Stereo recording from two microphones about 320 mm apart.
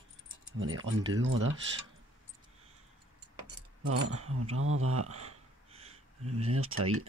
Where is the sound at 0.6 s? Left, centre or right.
Right.